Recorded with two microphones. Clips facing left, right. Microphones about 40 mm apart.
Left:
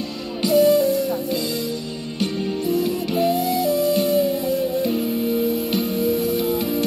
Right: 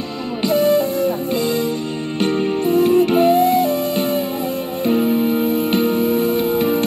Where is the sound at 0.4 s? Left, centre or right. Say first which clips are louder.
Even; right.